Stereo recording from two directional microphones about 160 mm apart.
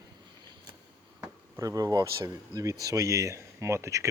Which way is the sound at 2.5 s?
20° right (ahead or behind).